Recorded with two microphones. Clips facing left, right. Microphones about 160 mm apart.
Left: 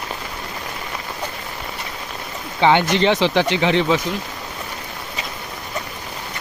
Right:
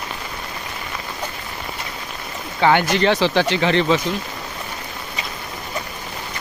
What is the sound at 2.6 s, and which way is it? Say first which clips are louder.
Speech: left 1 dB; 20° left (ahead or behind).